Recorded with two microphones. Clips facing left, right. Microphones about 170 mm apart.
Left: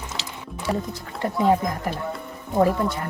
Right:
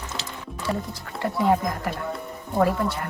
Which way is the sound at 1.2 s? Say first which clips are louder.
Left 1 dB; 20° left (ahead or behind).